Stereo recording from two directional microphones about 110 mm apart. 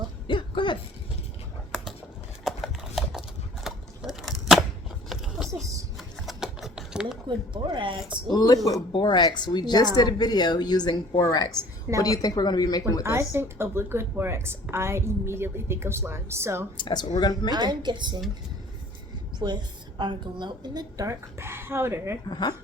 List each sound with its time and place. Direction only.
0.3 s throat clearing: 50° left (ahead or behind)
2.4 s horse: centre (ahead or behind)
5.0 s a sound: centre (ahead or behind)
7.3 s a woman's voice: 45° right (ahead or behind)
8.3 s a woman's voice: 35° left (ahead or behind)
8.9 s a woman's voice: 45° left (ahead or behind)
13.0 s speech: 25° right (ahead or behind)
16.7 s a woman's voice: 45° left (ahead or behind)
17.5 s a woman's voice: 40° right (ahead or behind)
19.4 s a woman's voice: 40° right (ahead or behind)
21.1 s speech: 25° right (ahead or behind)
22.3 s a woman's voice: 40° left (ahead or behind)